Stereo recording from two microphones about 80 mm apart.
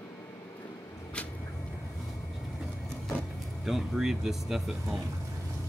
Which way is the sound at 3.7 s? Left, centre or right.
Centre.